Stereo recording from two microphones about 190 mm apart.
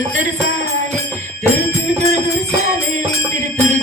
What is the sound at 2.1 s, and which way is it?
Music, 35° right (ahead or behind).